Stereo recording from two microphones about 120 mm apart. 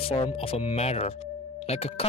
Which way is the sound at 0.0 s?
50° left (ahead or behind).